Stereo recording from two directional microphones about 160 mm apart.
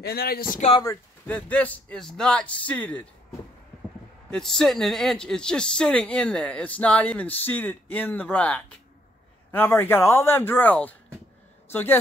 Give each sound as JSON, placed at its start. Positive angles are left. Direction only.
{"t": 0.0, "sound": "speech", "side_deg": 80}
{"t": 1.2, "sound": "a man's voice", "side_deg": 10}
{"t": 4.3, "sound": "a man's voice", "side_deg": 5}